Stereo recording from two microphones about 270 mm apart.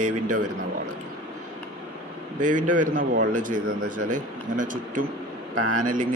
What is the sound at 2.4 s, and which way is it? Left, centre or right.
A man's voice, right.